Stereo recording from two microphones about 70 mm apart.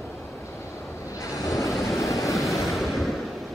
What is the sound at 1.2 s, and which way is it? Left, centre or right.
Vehicle, left.